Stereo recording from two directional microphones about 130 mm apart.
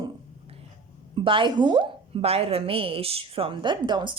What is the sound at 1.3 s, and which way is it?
A woman's voice, 40° right (ahead or behind).